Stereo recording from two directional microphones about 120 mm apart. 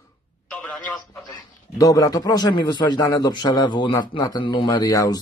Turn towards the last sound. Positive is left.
turn(degrees=30)  # may be behind; listen again after turning